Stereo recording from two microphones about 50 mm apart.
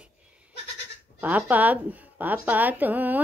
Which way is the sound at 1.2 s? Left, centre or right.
Right.